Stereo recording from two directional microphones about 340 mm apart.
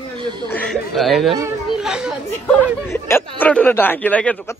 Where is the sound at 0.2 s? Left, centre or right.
Centre.